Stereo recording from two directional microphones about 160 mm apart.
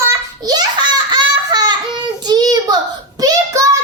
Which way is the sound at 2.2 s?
25° right (ahead or behind).